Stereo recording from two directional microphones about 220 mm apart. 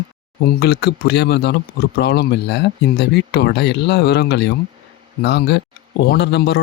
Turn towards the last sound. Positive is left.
turn(degrees=50)  # may be behind; listen again after turning